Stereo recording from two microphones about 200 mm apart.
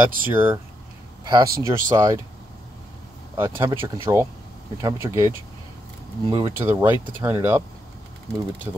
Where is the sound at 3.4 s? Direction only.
25° right (ahead or behind).